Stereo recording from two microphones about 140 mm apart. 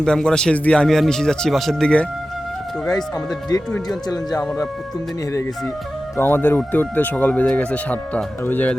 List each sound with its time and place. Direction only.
0.0 s speech: 5° left (ahead or behind)
6.1 s speech: 15° left (ahead or behind)